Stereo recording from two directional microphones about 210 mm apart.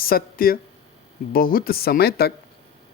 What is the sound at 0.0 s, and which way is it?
Speech, 45° left (ahead or behind).